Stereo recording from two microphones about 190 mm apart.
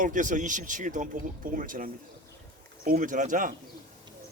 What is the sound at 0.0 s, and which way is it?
Speech, 45° right (ahead or behind).